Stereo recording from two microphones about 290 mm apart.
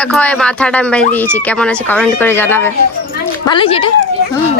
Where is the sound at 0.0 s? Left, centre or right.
Centre.